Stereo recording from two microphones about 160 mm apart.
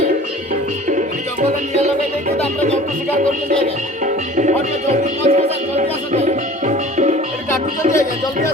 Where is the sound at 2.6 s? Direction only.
45° right (ahead or behind).